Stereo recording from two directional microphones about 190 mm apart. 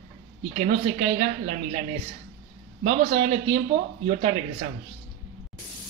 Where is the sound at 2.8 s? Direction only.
35° right (ahead or behind).